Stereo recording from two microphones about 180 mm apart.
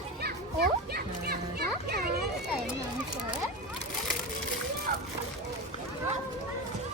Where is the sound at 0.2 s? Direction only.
60° right (ahead or behind).